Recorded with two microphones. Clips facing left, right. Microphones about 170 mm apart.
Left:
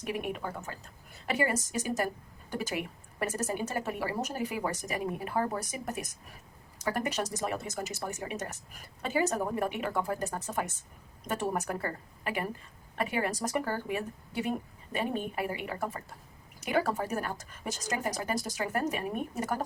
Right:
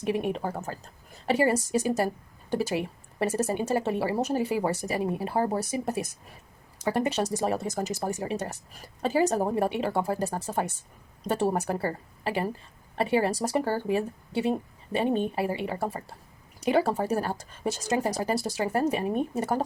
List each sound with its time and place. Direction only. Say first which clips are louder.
0.0 s speech: right 7 dB; 30° right (ahead or behind)